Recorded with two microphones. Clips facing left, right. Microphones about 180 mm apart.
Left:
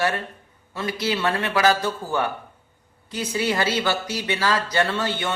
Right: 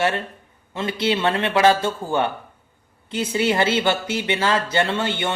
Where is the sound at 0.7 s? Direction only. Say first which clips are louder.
Right 3 dB; 25° right (ahead or behind).